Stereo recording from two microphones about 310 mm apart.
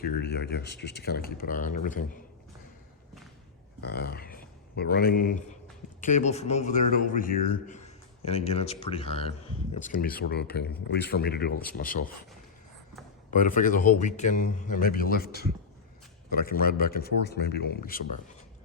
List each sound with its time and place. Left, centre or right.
0.2 s speech: left
3.8 s a man's voice: left
13.3 s a man's voice: left